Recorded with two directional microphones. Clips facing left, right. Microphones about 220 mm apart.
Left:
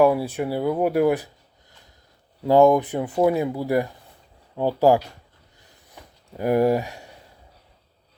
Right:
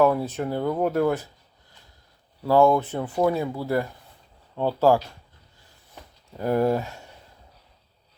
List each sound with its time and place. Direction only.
0.0 s speech: 10° left (ahead or behind)
2.4 s speech: 15° left (ahead or behind)
6.3 s speech: 15° left (ahead or behind)